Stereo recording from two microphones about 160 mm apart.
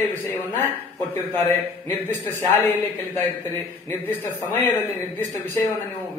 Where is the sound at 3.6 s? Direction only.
10° left (ahead or behind).